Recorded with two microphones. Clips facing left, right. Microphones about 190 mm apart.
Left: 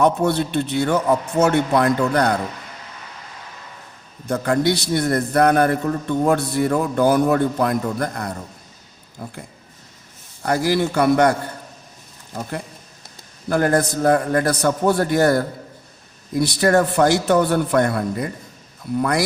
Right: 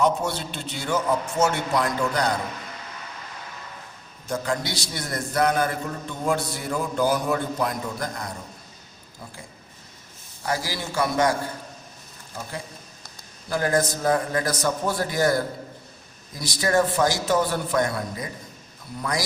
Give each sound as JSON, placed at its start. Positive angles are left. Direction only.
{"t": 0.0, "sound": "a man's voice", "side_deg": 60}
{"t": 4.3, "sound": "a man's voice", "side_deg": 60}
{"t": 10.4, "sound": "a man's voice", "side_deg": 55}
{"t": 13.5, "sound": "a man's voice", "side_deg": 60}